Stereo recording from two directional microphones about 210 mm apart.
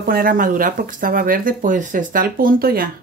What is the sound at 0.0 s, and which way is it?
Speech, 45° right (ahead or behind).